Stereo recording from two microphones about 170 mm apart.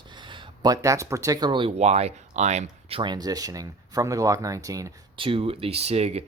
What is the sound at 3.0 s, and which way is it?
Speech, 25° right (ahead or behind).